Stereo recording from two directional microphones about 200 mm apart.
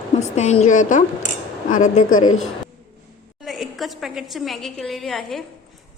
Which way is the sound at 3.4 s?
Centre (ahead or behind).